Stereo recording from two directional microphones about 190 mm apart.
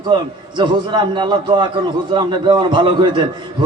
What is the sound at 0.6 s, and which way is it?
A man's voice, 25° right (ahead or behind).